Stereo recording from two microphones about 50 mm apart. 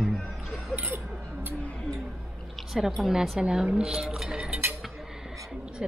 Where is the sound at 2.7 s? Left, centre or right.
Centre.